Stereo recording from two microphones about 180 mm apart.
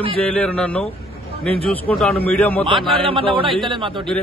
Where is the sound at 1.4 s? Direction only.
30° right (ahead or behind).